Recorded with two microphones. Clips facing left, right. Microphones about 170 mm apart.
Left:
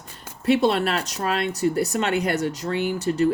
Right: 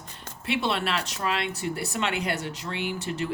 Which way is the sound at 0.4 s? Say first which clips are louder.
Left 8 dB; 40° left (ahead or behind).